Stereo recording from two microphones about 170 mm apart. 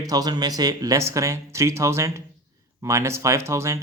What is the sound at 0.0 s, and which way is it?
Speech, 20° right (ahead or behind).